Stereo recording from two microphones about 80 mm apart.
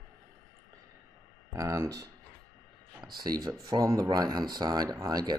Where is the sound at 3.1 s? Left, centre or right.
Right.